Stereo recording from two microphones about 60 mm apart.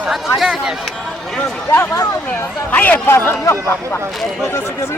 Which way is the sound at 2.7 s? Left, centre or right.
Left.